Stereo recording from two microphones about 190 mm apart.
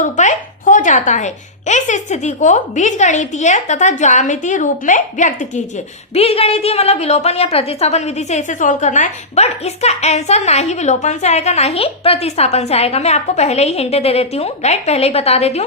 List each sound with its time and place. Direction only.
0.0 s a woman's voice: 40° left (ahead or behind)